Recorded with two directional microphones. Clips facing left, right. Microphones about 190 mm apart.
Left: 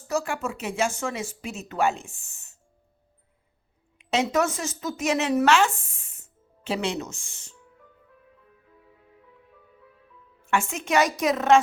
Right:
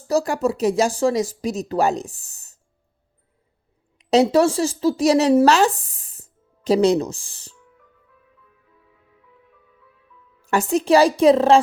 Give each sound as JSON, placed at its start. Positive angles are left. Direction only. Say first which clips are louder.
{"t": 0.1, "sound": "speech", "louder": "right 8 dB", "side_deg": -35}
{"t": 3.9, "sound": "speech", "louder": "right 9 dB", "side_deg": -35}
{"t": 10.4, "sound": "speech", "louder": "right 8 dB", "side_deg": -40}